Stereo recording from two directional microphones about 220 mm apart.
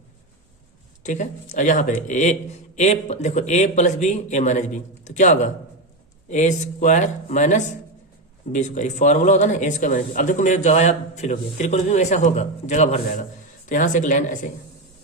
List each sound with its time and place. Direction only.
1.0 s a man's voice: 35° left (ahead or behind)